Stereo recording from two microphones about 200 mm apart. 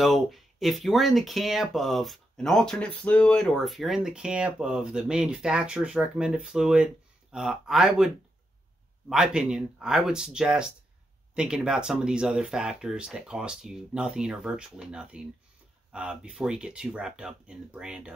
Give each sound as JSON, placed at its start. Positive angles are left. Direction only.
{"t": 0.0, "sound": "speech", "side_deg": 0}
{"t": 9.1, "sound": "speech", "side_deg": -5}